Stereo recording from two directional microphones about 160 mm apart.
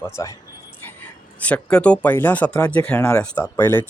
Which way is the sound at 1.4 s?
5° left (ahead or behind).